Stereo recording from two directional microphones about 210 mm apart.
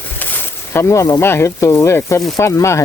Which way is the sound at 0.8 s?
15° left (ahead or behind).